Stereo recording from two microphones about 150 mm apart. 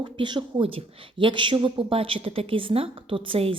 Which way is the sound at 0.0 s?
30° right (ahead or behind).